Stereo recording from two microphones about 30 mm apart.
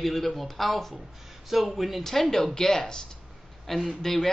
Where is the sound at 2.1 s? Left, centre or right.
Centre.